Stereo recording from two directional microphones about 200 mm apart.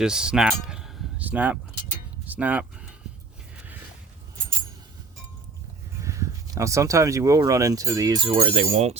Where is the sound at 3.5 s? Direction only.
10° right (ahead or behind).